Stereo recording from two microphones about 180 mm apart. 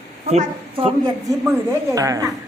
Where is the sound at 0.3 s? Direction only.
35° right (ahead or behind).